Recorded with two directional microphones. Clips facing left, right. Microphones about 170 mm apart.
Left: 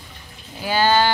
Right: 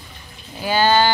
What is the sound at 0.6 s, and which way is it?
Speech, 25° right (ahead or behind).